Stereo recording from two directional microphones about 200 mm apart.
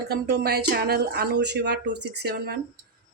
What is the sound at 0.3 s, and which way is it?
Speech, 55° right (ahead or behind).